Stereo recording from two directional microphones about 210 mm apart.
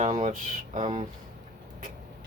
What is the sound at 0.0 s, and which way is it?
Speech, 35° right (ahead or behind).